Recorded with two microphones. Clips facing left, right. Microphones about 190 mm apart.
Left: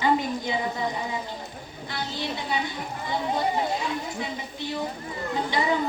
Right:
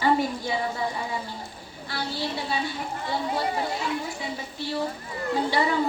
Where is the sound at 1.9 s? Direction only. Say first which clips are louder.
Right 1 dB; 20° left (ahead or behind).